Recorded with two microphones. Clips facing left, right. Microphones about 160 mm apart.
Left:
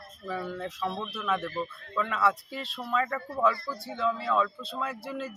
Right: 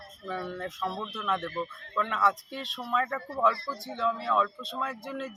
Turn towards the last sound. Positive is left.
turn(degrees=5)  # may be behind; listen again after turning